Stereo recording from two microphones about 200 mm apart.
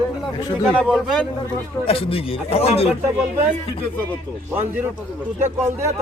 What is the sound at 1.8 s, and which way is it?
Speech, 25° left (ahead or behind).